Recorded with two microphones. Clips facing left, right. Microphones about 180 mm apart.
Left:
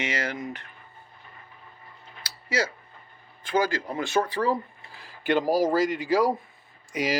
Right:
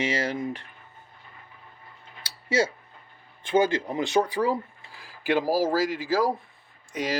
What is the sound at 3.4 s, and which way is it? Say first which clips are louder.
Speech: right 3 dB; 25° right (ahead or behind).